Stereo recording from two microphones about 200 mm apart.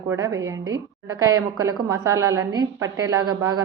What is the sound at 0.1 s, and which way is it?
A woman's voice, 15° right (ahead or behind).